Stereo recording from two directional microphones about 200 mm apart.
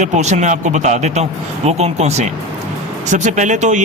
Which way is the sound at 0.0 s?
35° right (ahead or behind).